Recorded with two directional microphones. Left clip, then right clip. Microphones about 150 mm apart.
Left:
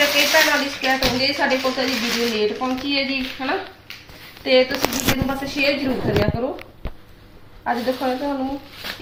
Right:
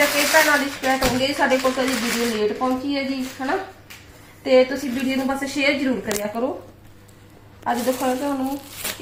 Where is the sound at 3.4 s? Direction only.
15° right (ahead or behind).